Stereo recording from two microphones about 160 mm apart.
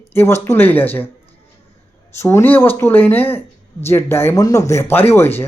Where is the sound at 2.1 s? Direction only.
15° left (ahead or behind).